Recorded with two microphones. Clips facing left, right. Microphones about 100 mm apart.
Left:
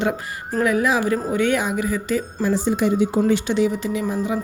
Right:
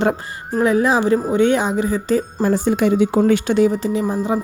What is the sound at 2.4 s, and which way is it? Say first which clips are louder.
Speech: right 2 dB; 55° right (ahead or behind).